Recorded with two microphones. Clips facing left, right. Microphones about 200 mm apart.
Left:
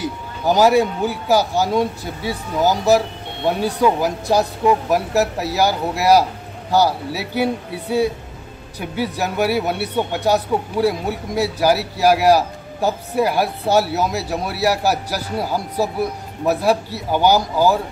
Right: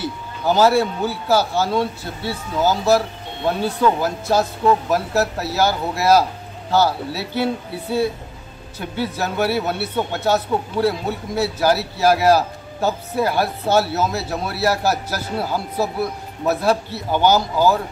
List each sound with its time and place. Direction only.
0.0 s a man's voice: 15° left (ahead or behind)